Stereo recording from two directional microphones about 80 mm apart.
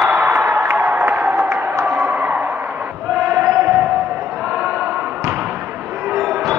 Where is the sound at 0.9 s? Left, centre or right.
Right.